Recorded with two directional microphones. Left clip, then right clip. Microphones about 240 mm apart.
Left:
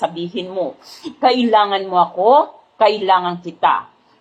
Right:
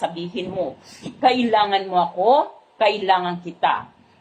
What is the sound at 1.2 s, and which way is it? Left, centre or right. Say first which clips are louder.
A woman's voice: left 4 dB; left.